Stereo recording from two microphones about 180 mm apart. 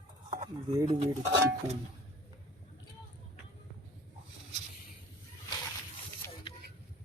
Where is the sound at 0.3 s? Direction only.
40° right (ahead or behind).